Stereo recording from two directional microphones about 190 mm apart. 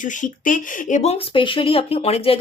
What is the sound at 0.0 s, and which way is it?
Speech, 40° left (ahead or behind).